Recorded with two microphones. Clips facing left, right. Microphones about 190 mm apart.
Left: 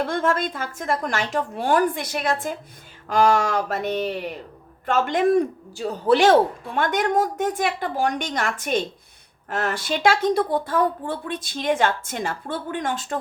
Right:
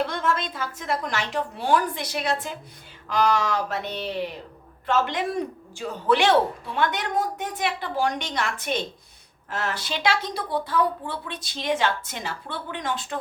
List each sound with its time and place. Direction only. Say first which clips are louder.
0.1 s a woman's voice: left 4 dB; 50° left (ahead or behind)